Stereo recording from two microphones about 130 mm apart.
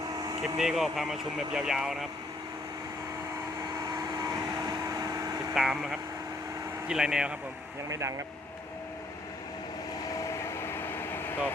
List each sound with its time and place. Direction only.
0.2 s vehicle: 30° right (ahead or behind)
0.6 s speech: 5° right (ahead or behind)
3.8 s vehicle: 30° right (ahead or behind)
5.5 s speech: 5° right (ahead or behind)
7.9 s speech: 25° right (ahead or behind)
10.2 s air conditioning: 20° left (ahead or behind)